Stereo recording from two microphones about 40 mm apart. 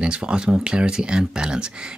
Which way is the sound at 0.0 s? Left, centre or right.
Right.